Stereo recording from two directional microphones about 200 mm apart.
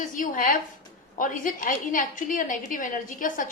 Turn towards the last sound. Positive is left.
turn(degrees=40)  # may be behind; listen again after turning